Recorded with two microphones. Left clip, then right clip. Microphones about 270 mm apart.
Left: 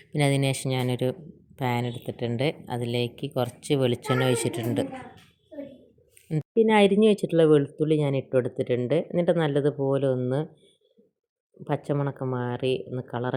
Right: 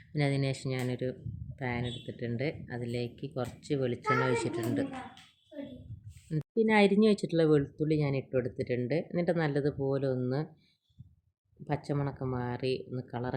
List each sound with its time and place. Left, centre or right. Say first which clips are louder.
0.1 s speech: left 7 dB; centre
6.4 s speech: left 6 dB; centre
11.6 s speech: left 7 dB; centre